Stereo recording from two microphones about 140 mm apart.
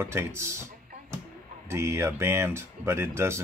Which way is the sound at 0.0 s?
15° right (ahead or behind).